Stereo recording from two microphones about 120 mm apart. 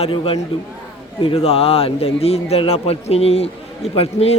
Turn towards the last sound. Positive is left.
turn(degrees=55)  # may be behind; listen again after turning